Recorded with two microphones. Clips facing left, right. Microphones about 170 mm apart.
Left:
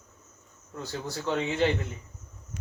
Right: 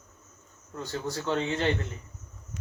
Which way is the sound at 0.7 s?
Centre (ahead or behind).